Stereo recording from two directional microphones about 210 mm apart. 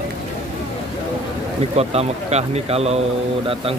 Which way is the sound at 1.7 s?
30° right (ahead or behind).